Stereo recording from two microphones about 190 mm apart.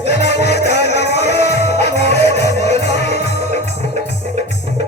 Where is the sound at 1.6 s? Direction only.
60° left (ahead or behind).